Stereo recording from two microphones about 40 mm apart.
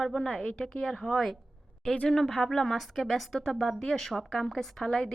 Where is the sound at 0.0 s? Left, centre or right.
Centre.